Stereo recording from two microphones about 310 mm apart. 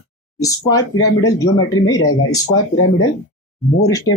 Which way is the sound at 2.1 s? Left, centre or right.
Left.